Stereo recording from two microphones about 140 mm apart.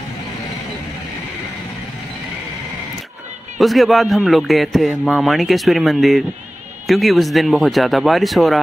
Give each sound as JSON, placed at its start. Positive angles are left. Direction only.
{"t": 3.5, "sound": "a man's voice", "side_deg": 0}